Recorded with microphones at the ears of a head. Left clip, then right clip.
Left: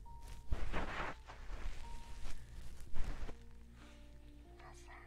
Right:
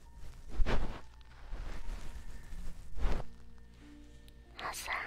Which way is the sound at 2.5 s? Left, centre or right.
Right.